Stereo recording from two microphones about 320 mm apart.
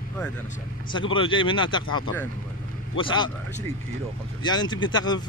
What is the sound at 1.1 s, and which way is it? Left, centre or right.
Speech, centre.